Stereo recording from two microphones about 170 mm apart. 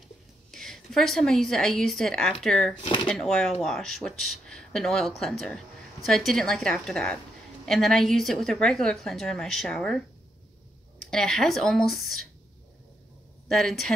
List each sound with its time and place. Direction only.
0.5 s a woman's voice: centre (ahead or behind)
2.8 s speech: 30° left (ahead or behind)
3.1 s speech: 5° left (ahead or behind)
11.1 s speech: centre (ahead or behind)
13.5 s speech: centre (ahead or behind)